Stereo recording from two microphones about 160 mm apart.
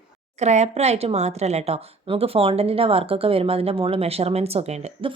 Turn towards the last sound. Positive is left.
turn(degrees=-40)  # may be behind; listen again after turning